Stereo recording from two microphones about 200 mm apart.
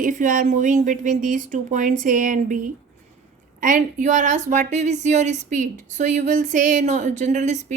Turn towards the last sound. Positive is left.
turn(degrees=-35)  # may be behind; listen again after turning